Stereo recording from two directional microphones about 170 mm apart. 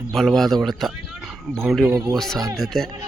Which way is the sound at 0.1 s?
Centre (ahead or behind).